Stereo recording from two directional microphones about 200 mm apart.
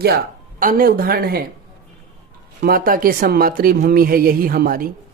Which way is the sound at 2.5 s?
50° right (ahead or behind).